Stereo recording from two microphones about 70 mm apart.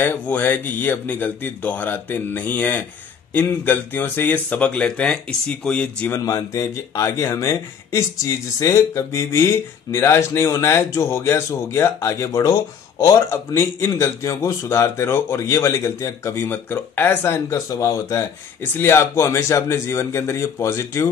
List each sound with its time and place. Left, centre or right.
0.0 s speech: left
6.2 s speech: left
16.4 s speech: left
17.6 s speech: left
18.6 s a man's voice: left